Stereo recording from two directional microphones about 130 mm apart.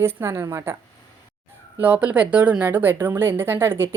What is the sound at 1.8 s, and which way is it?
A woman's voice, 10° right (ahead or behind).